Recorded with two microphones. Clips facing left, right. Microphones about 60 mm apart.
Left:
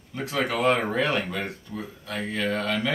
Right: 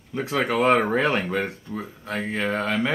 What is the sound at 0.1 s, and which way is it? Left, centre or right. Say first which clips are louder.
Speech: right 3 dB; right.